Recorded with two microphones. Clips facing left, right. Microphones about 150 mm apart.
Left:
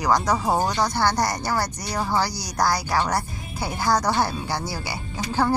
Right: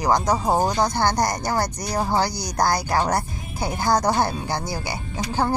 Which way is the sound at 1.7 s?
45° right (ahead or behind).